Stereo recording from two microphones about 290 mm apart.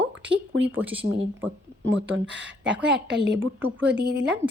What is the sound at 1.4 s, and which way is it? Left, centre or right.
Speech, right.